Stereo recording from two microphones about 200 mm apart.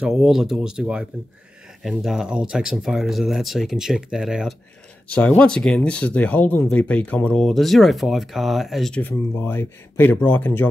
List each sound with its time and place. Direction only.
0.0 s speech: centre (ahead or behind)